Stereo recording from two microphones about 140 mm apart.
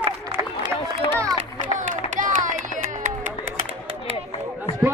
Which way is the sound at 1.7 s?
65° right (ahead or behind).